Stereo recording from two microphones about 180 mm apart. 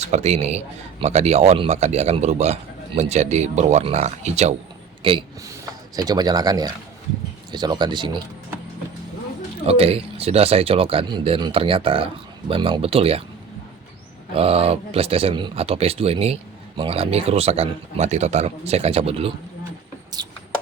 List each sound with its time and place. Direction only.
0.1 s speech: 35° right (ahead or behind)
9.6 s speech: 35° right (ahead or behind)
14.3 s speech: 35° right (ahead or behind)
20.1 s a sound: 20° right (ahead or behind)